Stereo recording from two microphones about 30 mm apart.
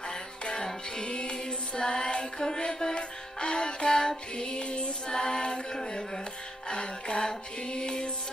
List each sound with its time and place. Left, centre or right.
0.7 s music: left